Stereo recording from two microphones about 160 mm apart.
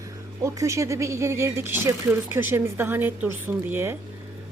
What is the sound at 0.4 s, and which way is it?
Speech, 20° right (ahead or behind).